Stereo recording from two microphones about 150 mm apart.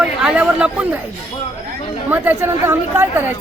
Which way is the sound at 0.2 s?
5° right (ahead or behind).